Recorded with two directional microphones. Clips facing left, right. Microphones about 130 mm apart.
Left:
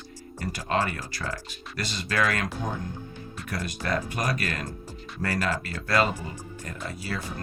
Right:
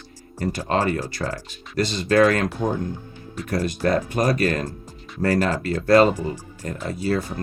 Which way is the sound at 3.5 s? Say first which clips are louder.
Right 8 dB; 40° right (ahead or behind).